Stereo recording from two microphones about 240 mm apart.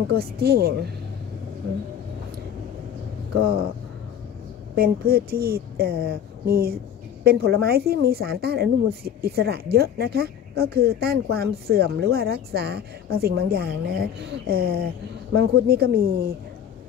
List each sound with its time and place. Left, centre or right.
0.1 s speech: right
4.7 s speech: right